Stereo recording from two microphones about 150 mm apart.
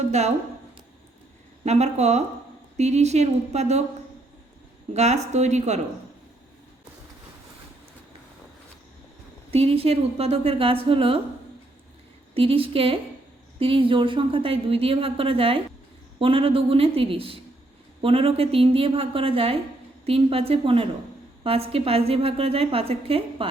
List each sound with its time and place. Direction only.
0.1 s a woman's voice: 50° right (ahead or behind)
1.6 s a woman's voice: 45° right (ahead or behind)
4.9 s a woman's voice: 45° right (ahead or behind)
9.5 s a woman's voice: 40° right (ahead or behind)
12.3 s a woman's voice: 40° right (ahead or behind)